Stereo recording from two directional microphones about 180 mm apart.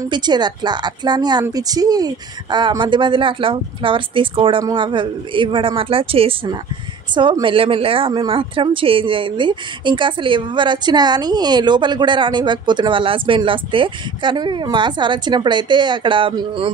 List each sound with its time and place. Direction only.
0.1 s a woman's voice: 25° right (ahead or behind)